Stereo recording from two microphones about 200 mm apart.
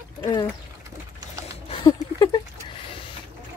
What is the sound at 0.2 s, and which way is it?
Speech, 20° left (ahead or behind).